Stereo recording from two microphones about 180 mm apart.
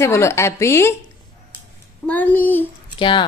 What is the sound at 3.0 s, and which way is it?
Speech, 25° left (ahead or behind).